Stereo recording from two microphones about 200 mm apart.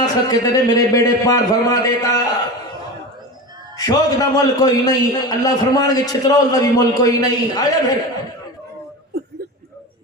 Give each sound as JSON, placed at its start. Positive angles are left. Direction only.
{"t": 0.0, "sound": "a man's voice", "side_deg": 20}
{"t": 3.8, "sound": "a man's voice", "side_deg": 20}